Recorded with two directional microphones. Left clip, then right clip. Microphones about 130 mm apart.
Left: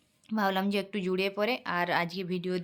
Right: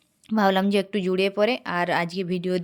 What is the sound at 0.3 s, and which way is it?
Speech, 55° right (ahead or behind).